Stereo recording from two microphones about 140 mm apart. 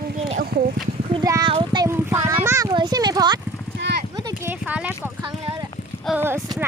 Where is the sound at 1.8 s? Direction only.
20° right (ahead or behind).